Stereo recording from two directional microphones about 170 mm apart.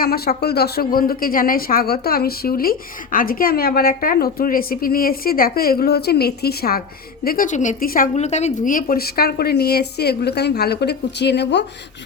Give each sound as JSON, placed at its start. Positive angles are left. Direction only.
{"t": 0.0, "sound": "speech", "side_deg": 65}
{"t": 7.3, "sound": "speech", "side_deg": 50}